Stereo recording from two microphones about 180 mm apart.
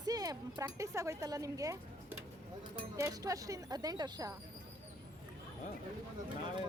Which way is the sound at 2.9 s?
15° right (ahead or behind).